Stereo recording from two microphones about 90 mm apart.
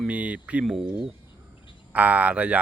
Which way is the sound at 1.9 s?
15° right (ahead or behind).